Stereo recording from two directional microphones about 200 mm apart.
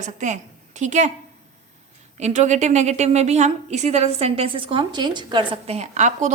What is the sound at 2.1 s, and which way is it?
A woman's voice, 35° right (ahead or behind).